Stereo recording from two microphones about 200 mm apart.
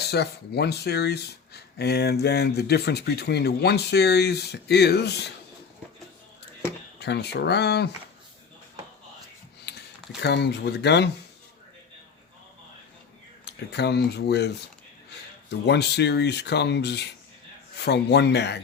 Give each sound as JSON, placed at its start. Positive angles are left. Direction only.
{"t": 0.1, "sound": "speech", "side_deg": 55}
{"t": 7.0, "sound": "speech", "side_deg": 55}
{"t": 9.7, "sound": "a sound", "side_deg": 55}
{"t": 10.2, "sound": "speech", "side_deg": 55}
{"t": 13.4, "sound": "speech", "side_deg": 55}